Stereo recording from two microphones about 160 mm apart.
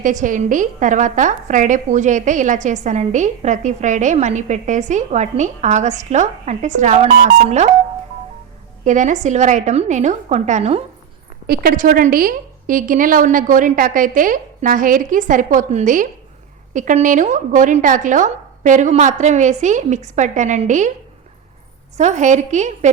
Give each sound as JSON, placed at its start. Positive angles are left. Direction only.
{"t": 0.0, "sound": "a woman's voice", "side_deg": -55}
{"t": 8.8, "sound": "a woman's voice", "side_deg": -50}
{"t": 11.4, "sound": "a woman's voice", "side_deg": -70}
{"t": 21.9, "sound": "a woman's voice", "side_deg": -45}